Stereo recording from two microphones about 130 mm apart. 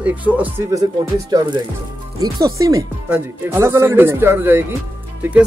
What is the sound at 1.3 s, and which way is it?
Speech, 30° right (ahead or behind).